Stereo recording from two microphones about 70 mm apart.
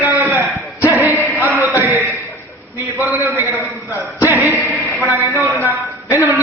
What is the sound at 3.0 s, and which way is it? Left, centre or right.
A man's voice, right.